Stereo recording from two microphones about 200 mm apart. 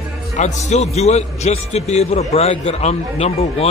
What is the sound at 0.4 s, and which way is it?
A man's voice, 35° left (ahead or behind).